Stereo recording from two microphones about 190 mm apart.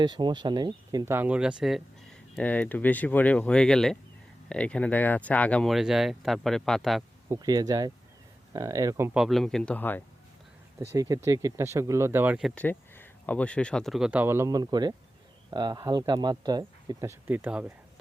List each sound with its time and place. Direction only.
0.0 s speech: 25° right (ahead or behind); by 1.8 s 5° right (ahead or behind)
2.3 s speech: 10° left (ahead or behind)
7.3 s speech: 20° right (ahead or behind)
9.2 s speech: centre (ahead or behind)
10.8 s speech: 15° right (ahead or behind); by 12.6 s centre (ahead or behind)
12.6 s speech: 10° left (ahead or behind); by 17.7 s 10° right (ahead or behind)